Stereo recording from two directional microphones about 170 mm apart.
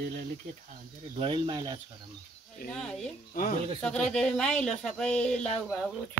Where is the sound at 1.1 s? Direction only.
30° right (ahead or behind).